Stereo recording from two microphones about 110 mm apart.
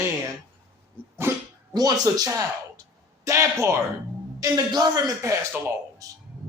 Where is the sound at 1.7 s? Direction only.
35° right (ahead or behind).